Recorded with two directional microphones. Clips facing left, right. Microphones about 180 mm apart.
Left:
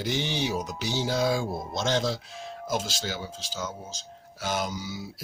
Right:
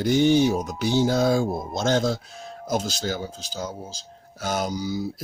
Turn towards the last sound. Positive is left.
turn(degrees=-40)  # may be behind; listen again after turning